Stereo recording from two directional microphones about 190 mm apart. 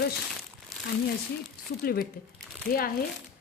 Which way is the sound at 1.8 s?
55° left (ahead or behind).